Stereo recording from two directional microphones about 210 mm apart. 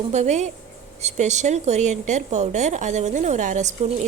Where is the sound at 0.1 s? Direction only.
35° right (ahead or behind).